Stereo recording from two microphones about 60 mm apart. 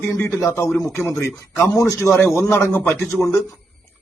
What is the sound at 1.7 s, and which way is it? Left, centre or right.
Speech, left.